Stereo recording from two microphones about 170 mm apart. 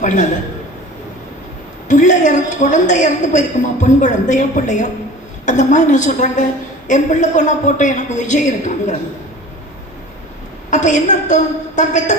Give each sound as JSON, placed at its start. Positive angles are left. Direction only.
{"t": 0.0, "sound": "a woman's voice", "side_deg": 45}
{"t": 1.9, "sound": "a woman's voice", "side_deg": 45}
{"t": 10.7, "sound": "a woman's voice", "side_deg": 45}